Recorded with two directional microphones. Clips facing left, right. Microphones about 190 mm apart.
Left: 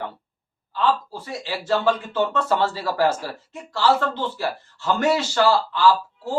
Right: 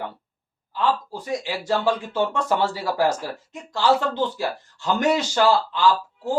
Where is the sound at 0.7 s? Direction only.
15° right (ahead or behind).